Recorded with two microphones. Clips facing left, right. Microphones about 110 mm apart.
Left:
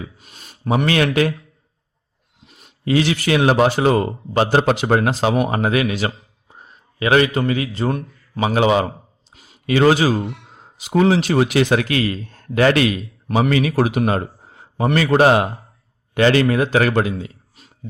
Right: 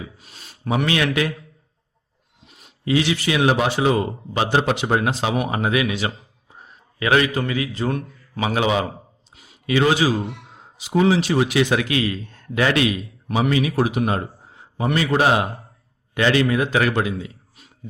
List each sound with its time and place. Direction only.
0.9 s a man's voice: 45° left (ahead or behind)
2.8 s a man's voice: 45° left (ahead or behind)
7.0 s a man's voice: 25° left (ahead or behind); by 13.5 s 45° left (ahead or behind)
13.5 s a man's voice: 60° left (ahead or behind)
14.4 s a sound: centre (ahead or behind)
14.9 s a man's voice: 50° left (ahead or behind)